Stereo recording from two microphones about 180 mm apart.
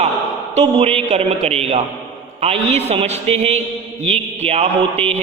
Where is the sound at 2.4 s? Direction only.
35° right (ahead or behind).